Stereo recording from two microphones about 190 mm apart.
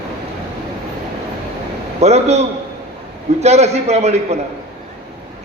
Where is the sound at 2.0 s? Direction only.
35° right (ahead or behind).